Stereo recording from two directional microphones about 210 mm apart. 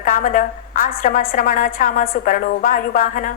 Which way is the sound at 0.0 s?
40° left (ahead or behind).